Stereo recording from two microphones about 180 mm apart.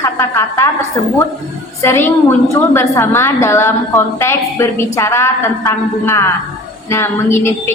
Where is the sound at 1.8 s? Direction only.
15° left (ahead or behind).